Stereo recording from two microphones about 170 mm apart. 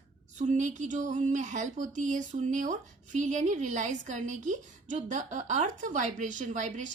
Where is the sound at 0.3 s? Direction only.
45° right (ahead or behind).